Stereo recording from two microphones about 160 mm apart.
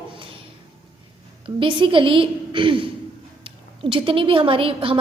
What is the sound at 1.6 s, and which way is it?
A woman's voice, 30° right (ahead or behind).